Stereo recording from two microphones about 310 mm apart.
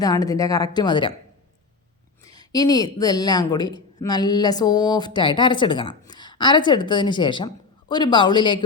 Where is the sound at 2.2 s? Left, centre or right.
Centre.